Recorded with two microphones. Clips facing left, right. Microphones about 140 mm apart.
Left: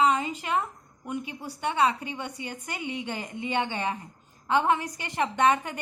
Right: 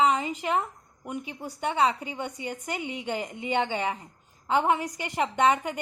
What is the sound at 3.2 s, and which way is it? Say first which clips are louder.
A woman's voice: right 3 dB; 20° right (ahead or behind).